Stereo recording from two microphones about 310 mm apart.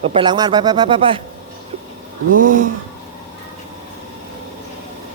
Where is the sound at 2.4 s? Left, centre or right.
Right.